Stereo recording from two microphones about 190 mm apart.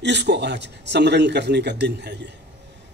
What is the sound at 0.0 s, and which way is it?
A man's voice, 65° right (ahead or behind).